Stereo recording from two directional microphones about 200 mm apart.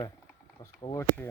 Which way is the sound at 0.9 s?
10° left (ahead or behind).